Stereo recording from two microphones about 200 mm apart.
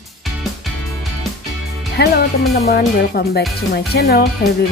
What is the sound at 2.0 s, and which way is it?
A woman's voice, 55° left (ahead or behind).